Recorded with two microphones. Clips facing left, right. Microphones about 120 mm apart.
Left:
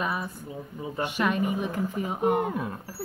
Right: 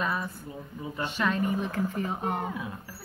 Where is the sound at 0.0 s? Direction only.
15° left (ahead or behind).